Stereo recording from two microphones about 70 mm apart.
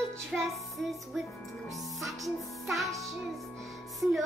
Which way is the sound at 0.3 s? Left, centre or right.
Centre.